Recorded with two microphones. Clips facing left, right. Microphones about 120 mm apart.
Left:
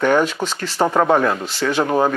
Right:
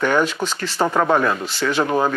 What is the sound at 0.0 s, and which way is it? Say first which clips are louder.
Speech: left 2 dB; 35° left (ahead or behind).